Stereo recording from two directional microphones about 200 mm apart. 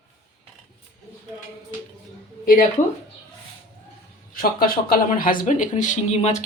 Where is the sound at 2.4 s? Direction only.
45° left (ahead or behind).